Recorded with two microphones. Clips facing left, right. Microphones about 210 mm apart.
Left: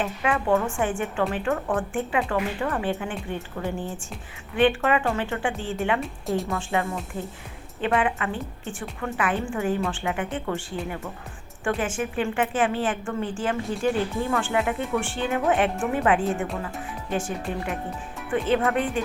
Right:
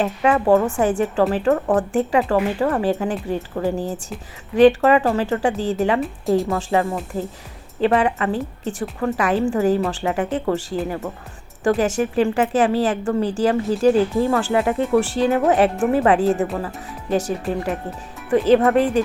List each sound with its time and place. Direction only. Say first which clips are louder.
0.0 s a woman's voice: right 7 dB; 40° right (ahead or behind)
6.0 s speech: right 8 dB; centre (ahead or behind)
6.5 s a woman's voice: right 6 dB; 35° right (ahead or behind)